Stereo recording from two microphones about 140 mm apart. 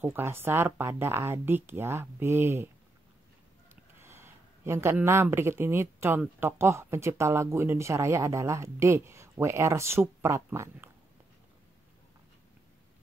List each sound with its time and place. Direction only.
0.0 s speech: 15° right (ahead or behind)